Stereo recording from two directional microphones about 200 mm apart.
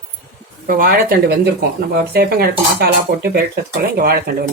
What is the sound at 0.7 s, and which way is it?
Speech, 45° right (ahead or behind).